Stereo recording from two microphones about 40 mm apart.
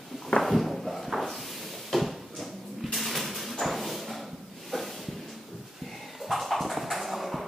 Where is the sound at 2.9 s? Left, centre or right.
Centre.